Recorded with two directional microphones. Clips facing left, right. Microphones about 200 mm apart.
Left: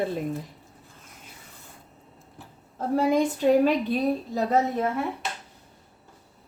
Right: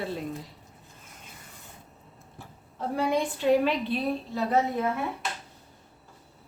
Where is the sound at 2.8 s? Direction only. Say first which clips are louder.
Left 5 dB; 45° left (ahead or behind).